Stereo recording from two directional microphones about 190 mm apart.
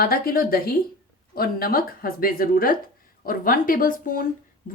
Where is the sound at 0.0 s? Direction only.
50° left (ahead or behind).